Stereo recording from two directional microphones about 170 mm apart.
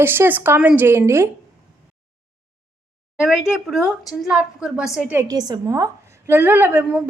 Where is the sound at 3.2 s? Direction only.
5° right (ahead or behind).